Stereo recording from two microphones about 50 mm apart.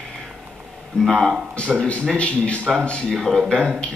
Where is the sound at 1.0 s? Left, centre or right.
Centre.